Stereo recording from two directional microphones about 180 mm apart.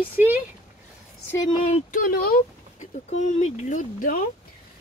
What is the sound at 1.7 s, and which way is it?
Speech, 50° left (ahead or behind).